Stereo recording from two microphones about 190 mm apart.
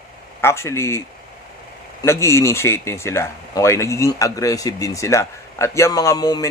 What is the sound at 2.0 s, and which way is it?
Speech, 15° left (ahead or behind).